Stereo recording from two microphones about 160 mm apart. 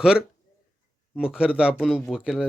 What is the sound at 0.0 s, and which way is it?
Speech, 5° right (ahead or behind).